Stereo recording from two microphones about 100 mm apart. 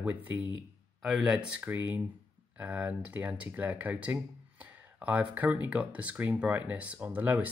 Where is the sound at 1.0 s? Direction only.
5° right (ahead or behind).